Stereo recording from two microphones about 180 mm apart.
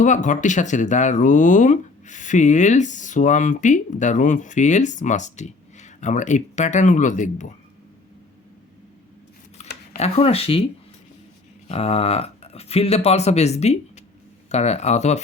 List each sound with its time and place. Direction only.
0.0 s speech: 45° left (ahead or behind)
9.6 s a sound: 35° left (ahead or behind)
10.0 s speech: 35° left (ahead or behind)
11.7 s speech: 35° left (ahead or behind)